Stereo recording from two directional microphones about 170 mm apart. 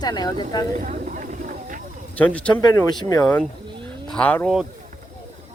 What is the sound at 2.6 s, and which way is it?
Speech, 25° left (ahead or behind).